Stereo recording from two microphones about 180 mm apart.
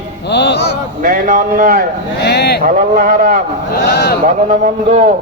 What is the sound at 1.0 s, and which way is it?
Speech, 50° right (ahead or behind).